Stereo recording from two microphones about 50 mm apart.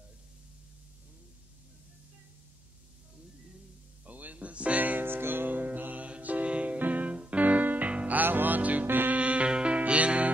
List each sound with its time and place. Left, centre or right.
4.0 s music: right
5.0 s music: right
8.2 s music: right
9.2 s music: right